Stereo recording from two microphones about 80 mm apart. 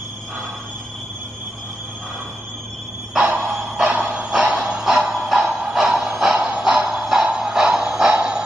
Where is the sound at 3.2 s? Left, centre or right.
Right.